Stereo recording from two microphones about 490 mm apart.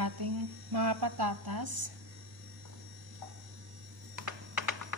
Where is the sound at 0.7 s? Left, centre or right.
Right.